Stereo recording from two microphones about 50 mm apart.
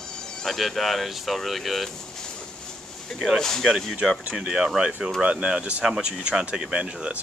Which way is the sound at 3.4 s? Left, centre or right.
Centre.